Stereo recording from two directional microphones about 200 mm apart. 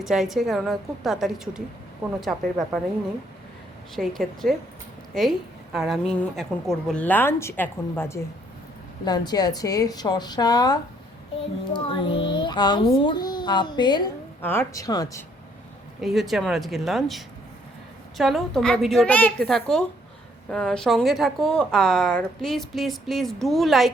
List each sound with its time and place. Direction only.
0.0 s a woman's voice: centre (ahead or behind)
3.9 s a woman's voice: centre (ahead or behind)
5.7 s a woman's voice: centre (ahead or behind); by 14.1 s 20° left (ahead or behind)
14.4 s a woman's voice: 10° left (ahead or behind)
16.0 s a woman's voice: centre (ahead or behind)